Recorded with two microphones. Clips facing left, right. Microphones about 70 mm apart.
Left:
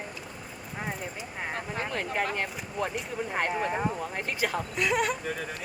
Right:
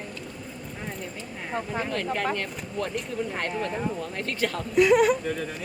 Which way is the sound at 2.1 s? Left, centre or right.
Centre.